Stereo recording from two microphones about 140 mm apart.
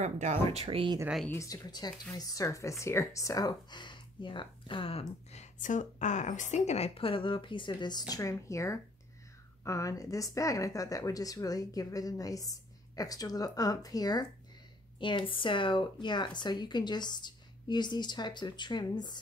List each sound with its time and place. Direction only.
0.0 s speech: 55° right (ahead or behind); by 0.9 s 40° right (ahead or behind)
1.3 s speech: 25° left (ahead or behind)
8.1 s speech: 25° left (ahead or behind)